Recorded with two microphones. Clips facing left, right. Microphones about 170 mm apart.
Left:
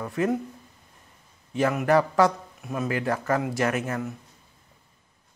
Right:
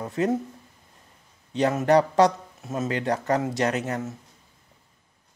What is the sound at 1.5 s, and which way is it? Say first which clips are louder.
Speech: right 2 dB; 25° right (ahead or behind).